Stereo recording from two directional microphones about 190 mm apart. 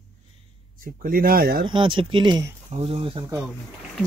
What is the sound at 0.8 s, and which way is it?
Speech, 50° right (ahead or behind).